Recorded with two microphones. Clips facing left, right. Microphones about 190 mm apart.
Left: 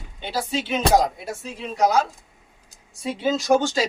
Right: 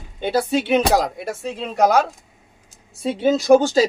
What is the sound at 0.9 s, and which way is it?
Speech, 75° right (ahead or behind).